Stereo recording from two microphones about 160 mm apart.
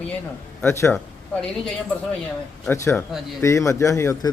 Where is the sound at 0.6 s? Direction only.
15° left (ahead or behind).